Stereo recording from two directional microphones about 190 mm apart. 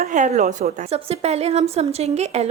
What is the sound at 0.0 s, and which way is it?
A woman's voice, 40° right (ahead or behind).